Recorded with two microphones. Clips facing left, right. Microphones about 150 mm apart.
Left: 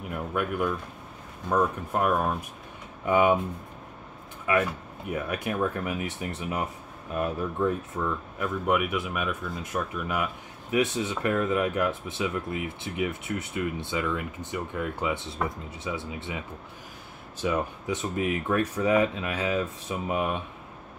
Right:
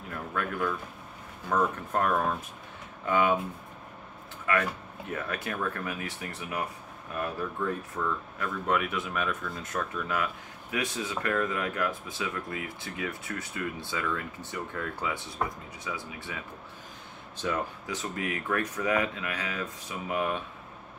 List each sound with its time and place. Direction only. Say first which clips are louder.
0.1 s speech: left 4 dB; 15° left (ahead or behind)
4.5 s speech: left 3 dB; 15° left (ahead or behind)